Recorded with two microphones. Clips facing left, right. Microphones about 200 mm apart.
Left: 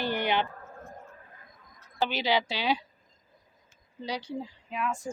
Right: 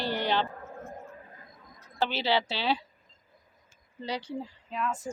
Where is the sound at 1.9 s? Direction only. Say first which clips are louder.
Even; 15° left (ahead or behind).